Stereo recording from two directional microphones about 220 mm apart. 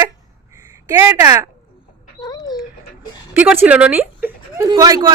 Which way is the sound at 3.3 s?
5° right (ahead or behind).